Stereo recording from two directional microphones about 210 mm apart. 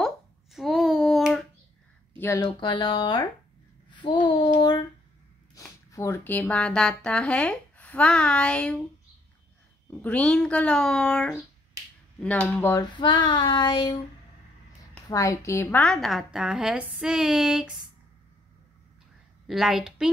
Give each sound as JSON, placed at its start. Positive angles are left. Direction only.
{"t": 0.0, "sound": "hands", "side_deg": 0}
{"t": 2.1, "sound": "speech", "side_deg": 15}
{"t": 3.9, "sound": "babbling", "side_deg": 25}
{"t": 4.6, "sound": "a sound", "side_deg": 20}
{"t": 5.5, "sound": "speech", "side_deg": 15}
{"t": 9.8, "sound": "a woman's voice", "side_deg": 5}
{"t": 13.0, "sound": "speech", "side_deg": 20}
{"t": 15.0, "sound": "a woman's voice", "side_deg": 15}
{"t": 19.4, "sound": "a woman's voice", "side_deg": 0}